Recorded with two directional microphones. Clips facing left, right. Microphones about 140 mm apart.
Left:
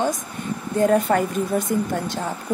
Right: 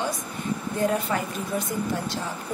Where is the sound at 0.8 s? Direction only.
45° left (ahead or behind).